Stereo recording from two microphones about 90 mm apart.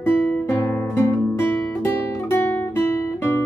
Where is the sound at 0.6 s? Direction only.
25° left (ahead or behind).